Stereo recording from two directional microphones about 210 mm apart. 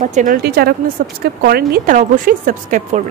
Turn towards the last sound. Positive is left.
turn(degrees=-40)  # may be behind; listen again after turning